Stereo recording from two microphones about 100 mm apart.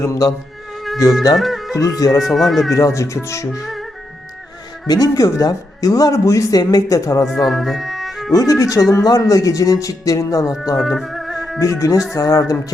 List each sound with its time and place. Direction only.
0.0 s speech: 30° left (ahead or behind)
1.4 s music: centre (ahead or behind)
1.7 s speech: 35° left (ahead or behind)
2.3 s speech: centre (ahead or behind)
2.6 s speech: 35° left (ahead or behind)
4.9 s speech: 35° left (ahead or behind)
7.4 s music: centre (ahead or behind)
8.3 s speech: 35° left (ahead or behind)
10.4 s speech: centre (ahead or behind)
10.8 s music: centre (ahead or behind)
11.6 s speech: 35° left (ahead or behind)